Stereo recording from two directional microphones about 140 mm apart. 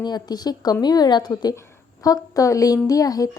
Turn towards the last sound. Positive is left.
turn(degrees=25)  # may be behind; listen again after turning